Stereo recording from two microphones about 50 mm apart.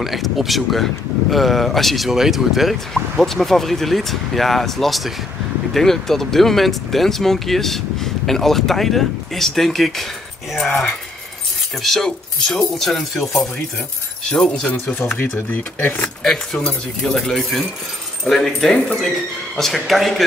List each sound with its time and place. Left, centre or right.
0.0 s speech: centre
2.0 s speech: centre
14.4 s speech: left
15.1 s speech: left
16.2 s speech: centre